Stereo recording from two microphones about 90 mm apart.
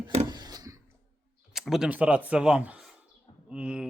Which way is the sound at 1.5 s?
5° right (ahead or behind).